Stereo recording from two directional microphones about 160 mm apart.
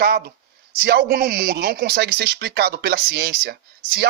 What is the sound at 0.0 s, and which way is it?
Speech, 75° right (ahead or behind).